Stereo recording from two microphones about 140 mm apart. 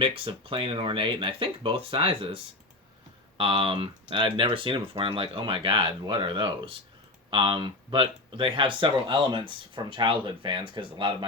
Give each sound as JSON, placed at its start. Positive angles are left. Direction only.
{"t": 0.0, "sound": "speech", "side_deg": -40}